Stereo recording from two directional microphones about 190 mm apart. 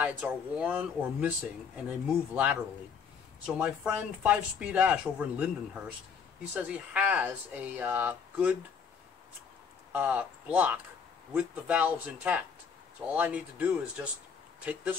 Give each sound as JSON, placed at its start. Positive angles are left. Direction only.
{"t": 0.0, "sound": "speech", "side_deg": -5}
{"t": 9.9, "sound": "speech", "side_deg": -10}